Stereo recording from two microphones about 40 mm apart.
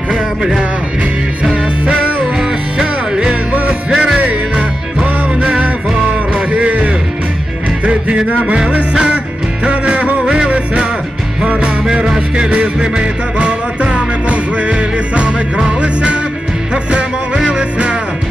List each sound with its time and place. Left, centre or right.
0.1 s music: centre
1.4 s music: right
4.2 s music: right
8.9 s music: right
9.7 s music: right
11.9 s music: centre
17.4 s music: right